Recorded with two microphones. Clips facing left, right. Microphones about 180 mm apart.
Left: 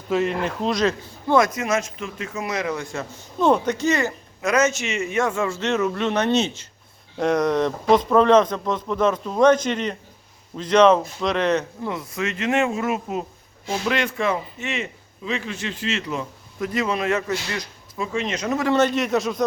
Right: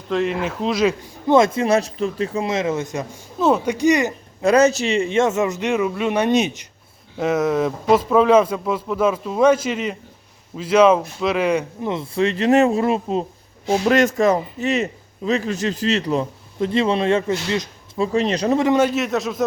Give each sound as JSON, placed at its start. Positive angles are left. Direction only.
{"t": 0.1, "sound": "speech", "side_deg": 0}
{"t": 1.3, "sound": "a man's voice", "side_deg": -25}
{"t": 3.3, "sound": "speech", "side_deg": -5}
{"t": 4.4, "sound": "a man's voice", "side_deg": -30}
{"t": 7.2, "sound": "speech", "side_deg": -5}
{"t": 11.9, "sound": "a man's voice", "side_deg": -30}
{"t": 13.7, "sound": "a man's voice", "side_deg": -45}
{"t": 18.6, "sound": "speech", "side_deg": -10}